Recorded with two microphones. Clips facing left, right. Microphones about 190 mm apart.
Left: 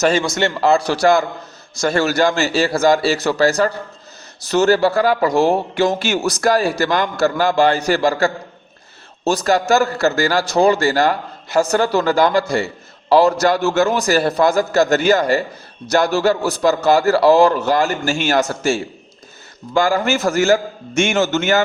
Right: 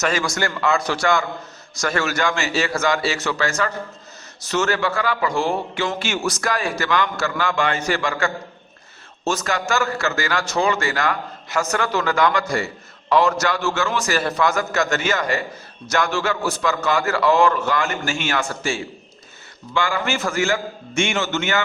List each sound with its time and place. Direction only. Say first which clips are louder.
0.0 s a man's voice: left 6 dB; 25° left (ahead or behind)